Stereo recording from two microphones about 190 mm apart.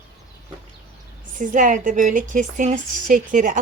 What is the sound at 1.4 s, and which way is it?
A woman's voice, 45° right (ahead or behind).